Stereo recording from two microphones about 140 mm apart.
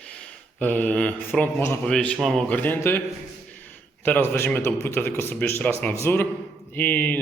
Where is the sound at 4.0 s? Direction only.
15° left (ahead or behind).